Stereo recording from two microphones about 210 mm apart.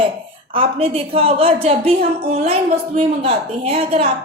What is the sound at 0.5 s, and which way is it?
A woman's voice, 25° right (ahead or behind).